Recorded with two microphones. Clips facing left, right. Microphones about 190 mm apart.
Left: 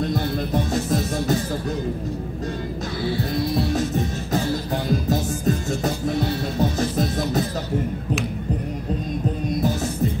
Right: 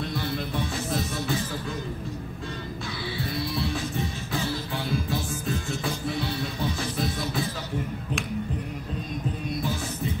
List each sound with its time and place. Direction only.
0.1 s music: 45° left (ahead or behind)
3.5 s music: 40° left (ahead or behind)